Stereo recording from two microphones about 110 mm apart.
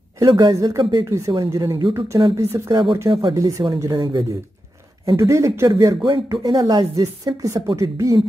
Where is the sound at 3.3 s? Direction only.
30° right (ahead or behind).